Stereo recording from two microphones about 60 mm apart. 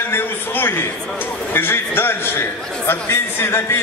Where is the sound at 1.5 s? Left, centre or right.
Left.